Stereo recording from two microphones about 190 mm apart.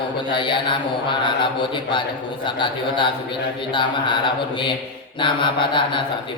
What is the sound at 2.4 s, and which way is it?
Speech, 25° left (ahead or behind).